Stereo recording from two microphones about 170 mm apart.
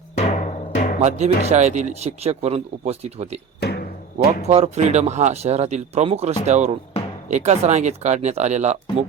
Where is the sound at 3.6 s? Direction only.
75° left (ahead or behind).